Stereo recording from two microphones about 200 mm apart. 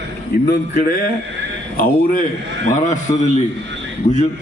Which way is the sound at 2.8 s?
35° left (ahead or behind).